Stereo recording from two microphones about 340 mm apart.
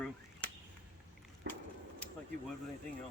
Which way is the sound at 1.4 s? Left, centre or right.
Right.